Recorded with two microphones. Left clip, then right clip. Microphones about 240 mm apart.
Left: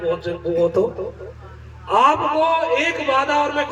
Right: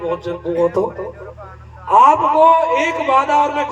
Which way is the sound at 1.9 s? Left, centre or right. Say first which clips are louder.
Right 5 dB; centre.